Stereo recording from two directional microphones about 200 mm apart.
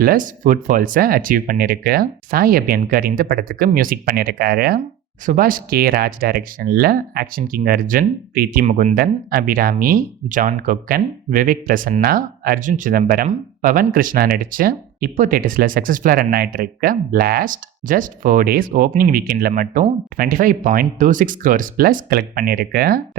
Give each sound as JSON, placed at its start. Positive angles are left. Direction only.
{"t": 0.0, "sound": "speech", "side_deg": -45}
{"t": 9.3, "sound": "speech", "side_deg": -45}
{"t": 19.5, "sound": "speech", "side_deg": -40}